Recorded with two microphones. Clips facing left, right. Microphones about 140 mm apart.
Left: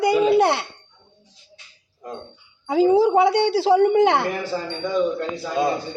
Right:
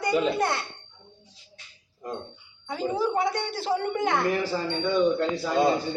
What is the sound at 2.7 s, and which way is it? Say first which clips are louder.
A woman's voice: left 11 dB; 80° left.